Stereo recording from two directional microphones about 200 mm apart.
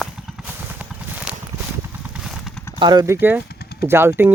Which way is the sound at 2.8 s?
20° right (ahead or behind).